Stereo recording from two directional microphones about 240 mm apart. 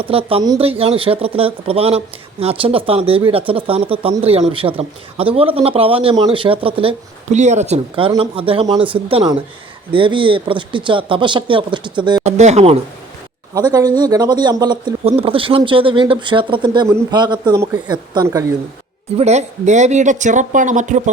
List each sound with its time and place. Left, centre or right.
0.0 s speech: right
13.5 s speech: centre
19.1 s speech: right